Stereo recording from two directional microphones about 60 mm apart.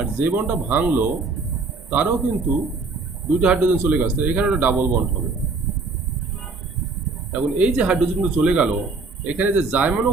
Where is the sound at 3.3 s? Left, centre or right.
Centre.